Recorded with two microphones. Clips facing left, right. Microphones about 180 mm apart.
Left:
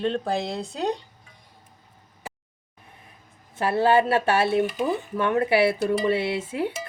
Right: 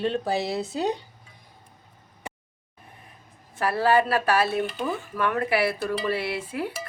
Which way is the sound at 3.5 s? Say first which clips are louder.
Left 2 dB; 25° left (ahead or behind).